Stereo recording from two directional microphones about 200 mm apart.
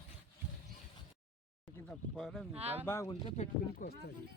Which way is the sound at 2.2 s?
Centre (ahead or behind).